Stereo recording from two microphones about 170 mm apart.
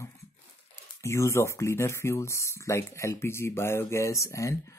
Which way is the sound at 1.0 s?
15° left (ahead or behind).